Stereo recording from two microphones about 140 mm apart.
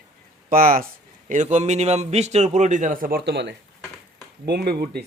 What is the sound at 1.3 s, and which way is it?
A man's voice, 60° right (ahead or behind).